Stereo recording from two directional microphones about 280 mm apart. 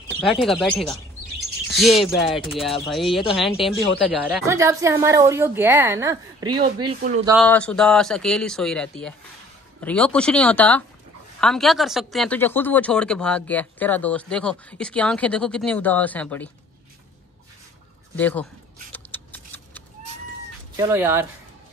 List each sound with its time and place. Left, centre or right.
0.2 s a woman's voice: centre
7.4 s speech: centre
18.1 s a sound: centre
20.7 s a woman's voice: centre